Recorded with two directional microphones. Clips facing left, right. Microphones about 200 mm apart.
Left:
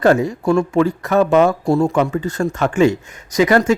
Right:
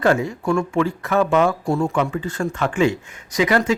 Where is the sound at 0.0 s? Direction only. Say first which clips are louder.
Left 4 dB; 40° left (ahead or behind).